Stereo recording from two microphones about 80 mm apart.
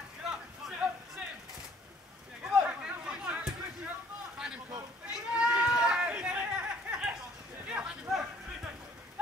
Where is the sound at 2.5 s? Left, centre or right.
Right.